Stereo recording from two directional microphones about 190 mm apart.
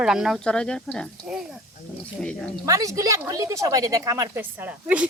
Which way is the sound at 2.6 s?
20° right (ahead or behind).